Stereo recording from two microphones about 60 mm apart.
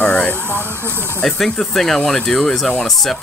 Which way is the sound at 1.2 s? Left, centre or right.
Centre.